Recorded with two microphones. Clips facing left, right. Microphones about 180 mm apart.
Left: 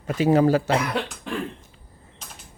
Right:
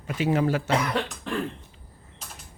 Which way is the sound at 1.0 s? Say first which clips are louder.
Even; centre (ahead or behind).